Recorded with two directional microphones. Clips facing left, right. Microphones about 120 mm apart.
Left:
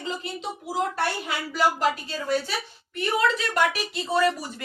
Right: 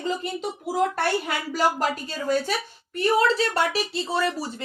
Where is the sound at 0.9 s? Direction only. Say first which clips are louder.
Right 3 dB; 45° right (ahead or behind).